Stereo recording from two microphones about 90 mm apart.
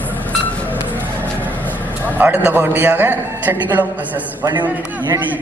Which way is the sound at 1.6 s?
20° left (ahead or behind).